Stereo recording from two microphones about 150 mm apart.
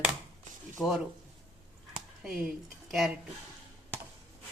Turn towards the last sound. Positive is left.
turn(degrees=0)  # may be behind; listen again after turning